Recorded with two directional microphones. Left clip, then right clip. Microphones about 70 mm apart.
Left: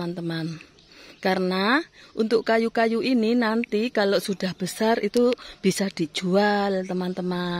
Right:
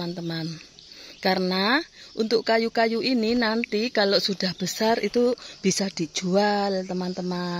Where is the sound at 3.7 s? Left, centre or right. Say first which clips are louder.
Even; centre.